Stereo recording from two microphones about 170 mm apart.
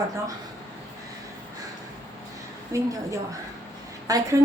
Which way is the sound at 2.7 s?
20° right (ahead or behind).